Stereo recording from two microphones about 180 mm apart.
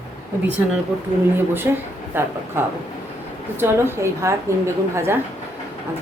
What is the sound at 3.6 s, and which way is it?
A woman's voice, 15° right (ahead or behind).